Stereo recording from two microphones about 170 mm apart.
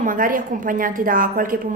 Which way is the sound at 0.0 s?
55° right (ahead or behind).